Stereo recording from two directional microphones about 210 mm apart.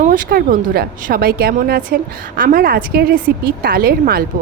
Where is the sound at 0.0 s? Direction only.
40° right (ahead or behind).